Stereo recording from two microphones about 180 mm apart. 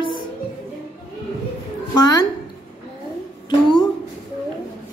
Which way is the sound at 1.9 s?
20° left (ahead or behind).